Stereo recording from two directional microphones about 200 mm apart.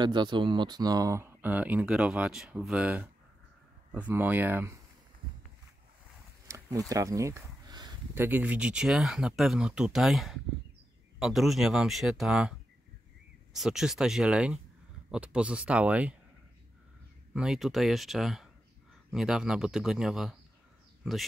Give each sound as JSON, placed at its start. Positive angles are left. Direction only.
{"t": 0.0, "sound": "speech", "side_deg": -20}
{"t": 6.4, "sound": "a sound", "side_deg": -15}
{"t": 6.9, "sound": "speech", "side_deg": -15}
{"t": 8.1, "sound": "speech", "side_deg": -10}
{"t": 17.3, "sound": "speech", "side_deg": -5}